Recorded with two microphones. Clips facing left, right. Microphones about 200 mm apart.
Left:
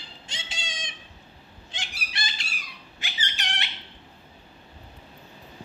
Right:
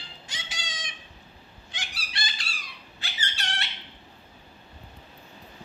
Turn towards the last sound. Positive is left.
turn(degrees=15)  # may be behind; listen again after turning